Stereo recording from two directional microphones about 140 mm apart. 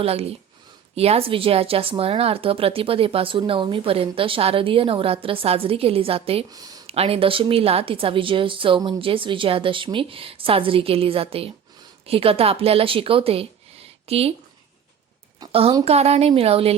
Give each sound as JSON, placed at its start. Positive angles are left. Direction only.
{"t": 0.0, "sound": "a woman's voice", "side_deg": -45}
{"t": 6.5, "sound": "speech", "side_deg": -25}
{"t": 6.8, "sound": "a woman's voice", "side_deg": -45}
{"t": 15.8, "sound": "a woman's voice", "side_deg": -50}